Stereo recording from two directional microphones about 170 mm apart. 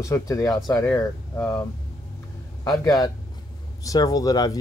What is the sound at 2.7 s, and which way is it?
Speech, 20° left (ahead or behind).